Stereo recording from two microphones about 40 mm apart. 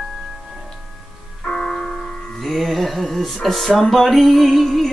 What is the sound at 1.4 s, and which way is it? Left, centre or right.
Music, centre.